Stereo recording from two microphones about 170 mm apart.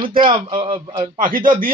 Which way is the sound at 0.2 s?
30° right (ahead or behind).